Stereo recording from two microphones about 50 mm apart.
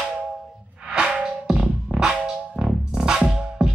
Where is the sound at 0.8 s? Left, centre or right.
Centre.